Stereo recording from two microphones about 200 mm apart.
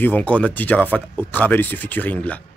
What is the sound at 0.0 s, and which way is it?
Speech, 10° left (ahead or behind).